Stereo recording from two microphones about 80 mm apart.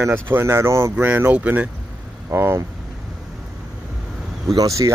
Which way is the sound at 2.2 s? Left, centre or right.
Right.